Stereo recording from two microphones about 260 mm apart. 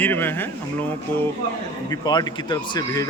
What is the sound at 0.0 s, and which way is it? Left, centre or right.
A man's voice, centre.